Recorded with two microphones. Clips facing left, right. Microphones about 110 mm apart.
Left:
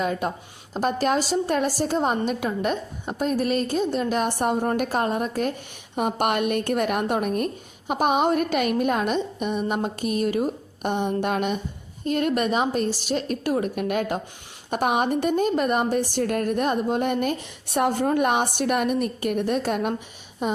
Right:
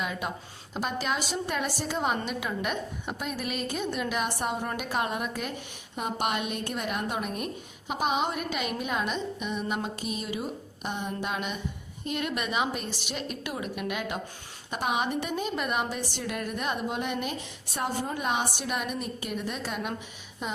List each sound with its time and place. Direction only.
0.0 s a woman's voice: 40° left (ahead or behind)
6.0 s a woman's voice: 55° left (ahead or behind)
17.7 s a woman's voice: 60° left (ahead or behind)